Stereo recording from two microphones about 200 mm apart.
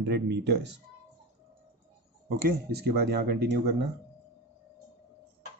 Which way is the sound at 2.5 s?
50° right (ahead or behind).